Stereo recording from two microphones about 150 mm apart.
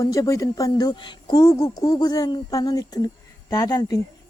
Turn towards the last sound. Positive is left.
turn(degrees=25)  # may be behind; listen again after turning